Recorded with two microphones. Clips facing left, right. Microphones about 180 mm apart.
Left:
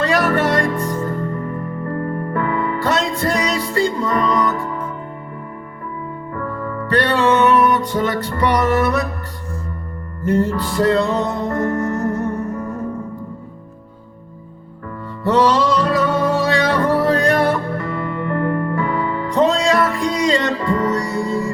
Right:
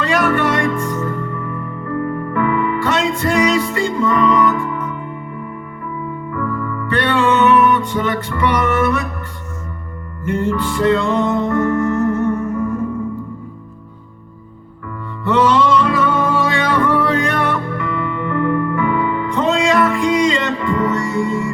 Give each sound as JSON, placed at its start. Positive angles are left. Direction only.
{"t": 0.0, "sound": "music", "side_deg": 35}
{"t": 6.3, "sound": "music", "side_deg": 35}
{"t": 10.2, "sound": "music", "side_deg": 35}
{"t": 15.2, "sound": "music", "side_deg": 35}